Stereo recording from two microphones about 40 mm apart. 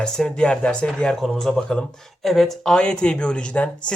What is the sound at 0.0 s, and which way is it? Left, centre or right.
Speech, centre.